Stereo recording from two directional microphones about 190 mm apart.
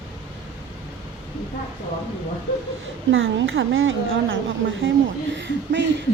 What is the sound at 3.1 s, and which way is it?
A woman's voice, 85° right.